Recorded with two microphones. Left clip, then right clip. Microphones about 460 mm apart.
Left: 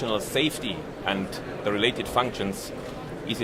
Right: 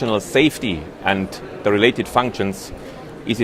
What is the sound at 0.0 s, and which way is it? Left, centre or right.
Speech, right.